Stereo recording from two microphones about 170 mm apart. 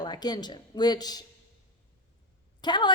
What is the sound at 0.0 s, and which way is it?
A woman's voice, 25° left (ahead or behind).